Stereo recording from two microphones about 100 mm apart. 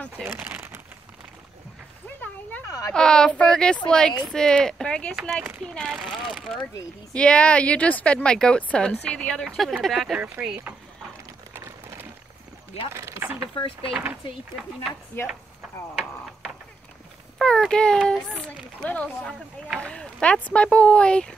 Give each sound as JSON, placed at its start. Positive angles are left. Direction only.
{"t": 2.0, "sound": "a sound", "side_deg": 15}
{"t": 2.6, "sound": "a sound", "side_deg": 35}
{"t": 2.9, "sound": "speech", "side_deg": 5}
{"t": 5.8, "sound": "speech", "side_deg": -5}
{"t": 7.2, "sound": "speech", "side_deg": 10}
{"t": 11.5, "sound": "a sound", "side_deg": -20}
{"t": 12.9, "sound": "speech", "side_deg": -25}
{"t": 13.6, "sound": "speech", "side_deg": 65}
{"t": 17.4, "sound": "a child's voice", "side_deg": 5}